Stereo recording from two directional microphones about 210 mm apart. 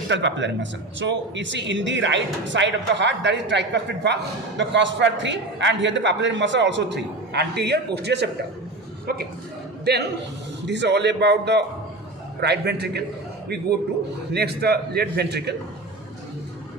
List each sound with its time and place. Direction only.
0.1 s a man's voice: 60° right (ahead or behind)
14.3 s a man's voice: 50° right (ahead or behind)